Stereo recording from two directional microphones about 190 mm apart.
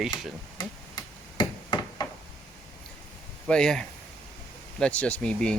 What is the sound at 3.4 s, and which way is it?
Speech, 5° left (ahead or behind).